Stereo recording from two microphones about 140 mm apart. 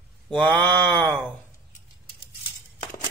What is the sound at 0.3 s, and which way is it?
Speech, 10° left (ahead or behind).